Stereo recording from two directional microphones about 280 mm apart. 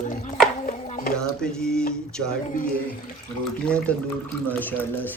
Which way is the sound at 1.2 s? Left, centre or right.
Centre.